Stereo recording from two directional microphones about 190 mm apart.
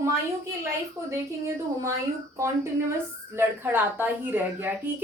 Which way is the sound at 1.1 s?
15° right (ahead or behind).